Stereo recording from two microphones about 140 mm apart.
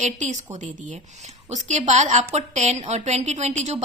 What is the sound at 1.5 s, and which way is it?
A woman's voice, 60° right (ahead or behind).